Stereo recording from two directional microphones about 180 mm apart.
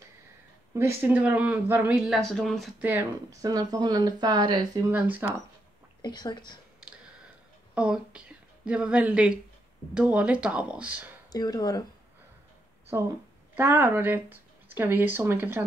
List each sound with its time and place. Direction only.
0.7 s speech: 10° right (ahead or behind)
2.8 s speech: 10° right (ahead or behind)
4.8 s speech: 10° right (ahead or behind)
6.0 s speech: 25° left (ahead or behind)
7.7 s speech: 5° right (ahead or behind)
11.3 s speech: 20° left (ahead or behind)
12.9 s speech: 15° right (ahead or behind)